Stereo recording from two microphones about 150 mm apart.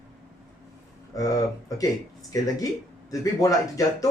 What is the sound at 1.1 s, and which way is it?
Speech, 25° left (ahead or behind).